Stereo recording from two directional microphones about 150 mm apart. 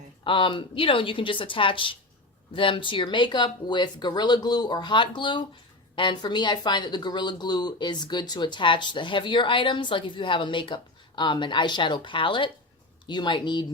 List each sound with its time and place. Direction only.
0.3 s speech: 35° left (ahead or behind)